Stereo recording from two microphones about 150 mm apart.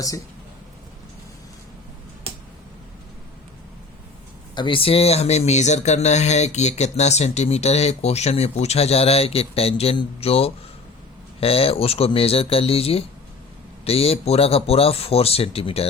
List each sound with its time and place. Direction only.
4.5 s speech: 35° left (ahead or behind)